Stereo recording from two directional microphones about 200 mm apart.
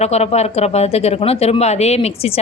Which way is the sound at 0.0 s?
30° left (ahead or behind).